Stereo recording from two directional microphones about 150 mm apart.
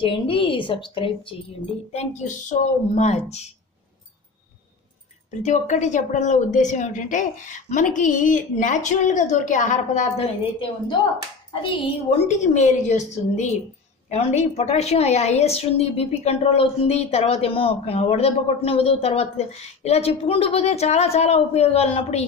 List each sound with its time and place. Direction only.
0.0 s a woman's voice: 35° left (ahead or behind)
1.9 s a woman's voice: 50° left (ahead or behind)
5.3 s a woman's voice: 50° left (ahead or behind)